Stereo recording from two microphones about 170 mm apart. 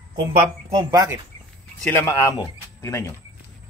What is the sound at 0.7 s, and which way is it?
Speech, 20° right (ahead or behind).